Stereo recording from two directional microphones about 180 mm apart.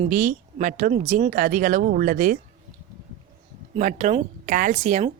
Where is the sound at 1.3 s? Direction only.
50° right (ahead or behind).